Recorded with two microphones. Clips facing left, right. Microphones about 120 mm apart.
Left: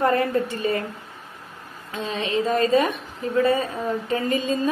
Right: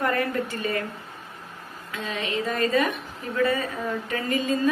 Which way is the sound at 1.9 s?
30° left (ahead or behind).